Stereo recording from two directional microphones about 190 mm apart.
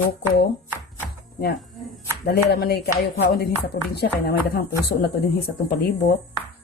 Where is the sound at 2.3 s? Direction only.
55° left (ahead or behind).